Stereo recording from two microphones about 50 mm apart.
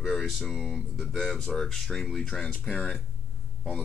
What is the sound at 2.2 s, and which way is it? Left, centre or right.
Speech, centre.